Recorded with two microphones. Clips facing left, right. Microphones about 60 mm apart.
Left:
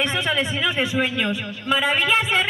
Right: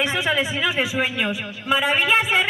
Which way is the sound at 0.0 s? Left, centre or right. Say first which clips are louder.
Right 1 dB; centre.